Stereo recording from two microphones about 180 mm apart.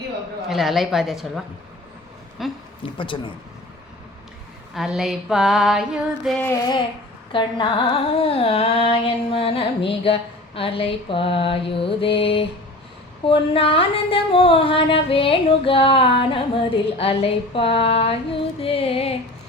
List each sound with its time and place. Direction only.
0.4 s female singing: centre (ahead or behind)
2.8 s speech: 30° left (ahead or behind)
4.7 s female singing: centre (ahead or behind)
6.5 s speech: 25° left (ahead or behind)
7.3 s carnatic music: 25° left (ahead or behind)